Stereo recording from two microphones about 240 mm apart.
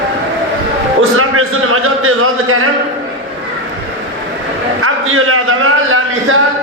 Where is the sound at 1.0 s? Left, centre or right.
Right.